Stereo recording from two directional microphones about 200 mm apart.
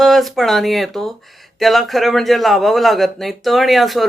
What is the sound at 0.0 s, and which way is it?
Speech, centre (ahead or behind).